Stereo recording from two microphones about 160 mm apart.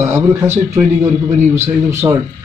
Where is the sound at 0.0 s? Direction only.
15° right (ahead or behind).